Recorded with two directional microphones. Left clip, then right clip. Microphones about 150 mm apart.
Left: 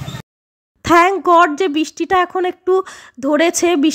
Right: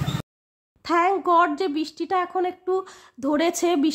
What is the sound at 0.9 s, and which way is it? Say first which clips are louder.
A woman's voice: left 9 dB; 30° left (ahead or behind).